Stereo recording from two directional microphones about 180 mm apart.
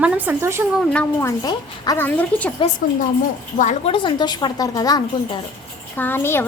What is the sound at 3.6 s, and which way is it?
A woman's voice, 35° left (ahead or behind).